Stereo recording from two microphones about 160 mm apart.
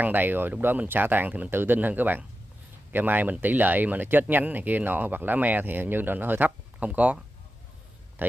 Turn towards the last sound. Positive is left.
turn(degrees=-10)  # may be behind; listen again after turning